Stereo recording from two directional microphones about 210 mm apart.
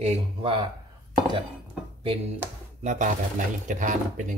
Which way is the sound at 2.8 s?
35° right (ahead or behind).